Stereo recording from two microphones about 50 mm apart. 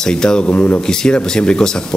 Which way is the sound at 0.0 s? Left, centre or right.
Centre.